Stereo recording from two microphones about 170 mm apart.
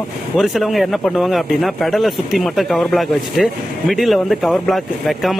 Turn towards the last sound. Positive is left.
turn(degrees=0)  # may be behind; listen again after turning